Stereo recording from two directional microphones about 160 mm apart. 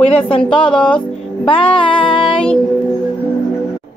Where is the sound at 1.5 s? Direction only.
35° left (ahead or behind).